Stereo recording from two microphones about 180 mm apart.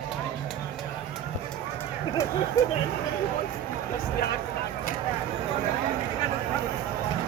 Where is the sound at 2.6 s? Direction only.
15° left (ahead or behind).